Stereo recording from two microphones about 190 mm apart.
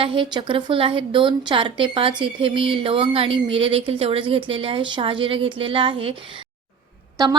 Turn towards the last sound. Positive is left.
turn(degrees=-20)  # may be behind; listen again after turning